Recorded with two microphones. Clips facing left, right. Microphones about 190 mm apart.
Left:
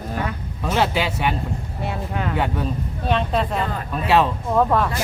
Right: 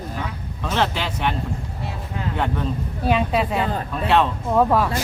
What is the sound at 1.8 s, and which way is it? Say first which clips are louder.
Speech: left 5 dB; 65° left (ahead or behind).